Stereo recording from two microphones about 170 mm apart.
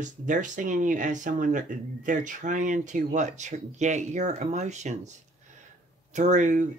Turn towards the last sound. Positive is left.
turn(degrees=-45)  # may be behind; listen again after turning